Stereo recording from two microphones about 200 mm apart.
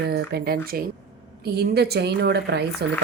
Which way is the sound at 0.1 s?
50° right (ahead or behind).